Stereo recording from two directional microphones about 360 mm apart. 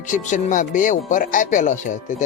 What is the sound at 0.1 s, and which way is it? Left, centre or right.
Speech, centre.